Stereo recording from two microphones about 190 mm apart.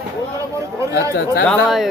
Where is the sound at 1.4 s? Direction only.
Centre (ahead or behind).